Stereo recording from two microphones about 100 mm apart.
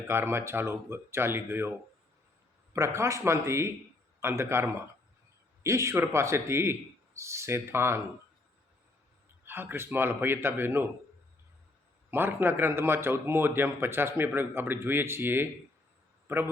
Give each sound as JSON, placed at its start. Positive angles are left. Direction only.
{"t": 0.1, "sound": "a man's voice", "side_deg": -25}
{"t": 2.7, "sound": "a man's voice", "side_deg": -30}
{"t": 9.4, "sound": "a man's voice", "side_deg": -20}
{"t": 12.1, "sound": "a man's voice", "side_deg": -20}
{"t": 16.2, "sound": "a sound", "side_deg": -25}